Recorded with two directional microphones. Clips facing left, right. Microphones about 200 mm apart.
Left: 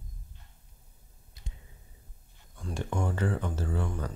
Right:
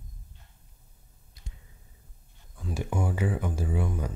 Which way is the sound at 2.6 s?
5° right (ahead or behind).